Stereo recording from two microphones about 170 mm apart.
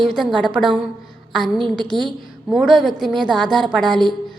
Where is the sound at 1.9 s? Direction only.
Centre (ahead or behind).